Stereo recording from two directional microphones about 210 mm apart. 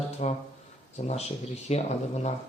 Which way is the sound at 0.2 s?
35° left (ahead or behind).